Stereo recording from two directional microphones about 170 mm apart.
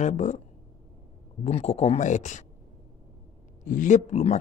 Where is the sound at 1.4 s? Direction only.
40° left (ahead or behind).